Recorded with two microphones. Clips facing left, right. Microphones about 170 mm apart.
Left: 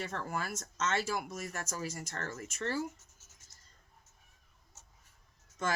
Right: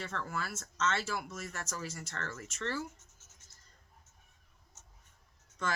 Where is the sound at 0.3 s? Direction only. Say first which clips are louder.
Left 2 dB; 15° left (ahead or behind).